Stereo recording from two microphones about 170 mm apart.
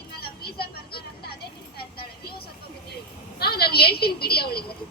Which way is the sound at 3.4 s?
65° left (ahead or behind).